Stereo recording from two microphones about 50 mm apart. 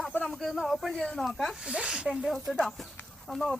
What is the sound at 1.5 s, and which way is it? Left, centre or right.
Speech, right.